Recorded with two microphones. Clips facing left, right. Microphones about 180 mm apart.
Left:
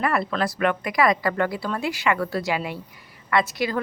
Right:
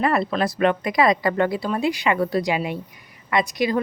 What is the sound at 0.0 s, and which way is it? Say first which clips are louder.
Speech: right 3 dB; 25° right (ahead or behind).